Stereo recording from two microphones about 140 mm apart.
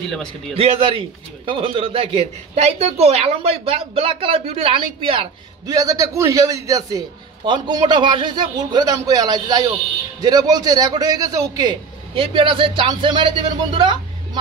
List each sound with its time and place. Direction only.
0.1 s a man's voice: centre (ahead or behind)
0.6 s a man's voice: 40° right (ahead or behind)
5.7 s a man's voice: 25° right (ahead or behind)